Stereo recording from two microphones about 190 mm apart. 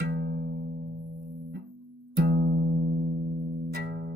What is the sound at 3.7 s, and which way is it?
Music, 60° right (ahead or behind).